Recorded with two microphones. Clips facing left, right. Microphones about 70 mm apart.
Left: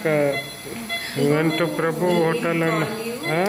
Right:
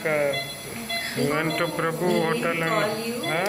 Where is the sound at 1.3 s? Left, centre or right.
Centre.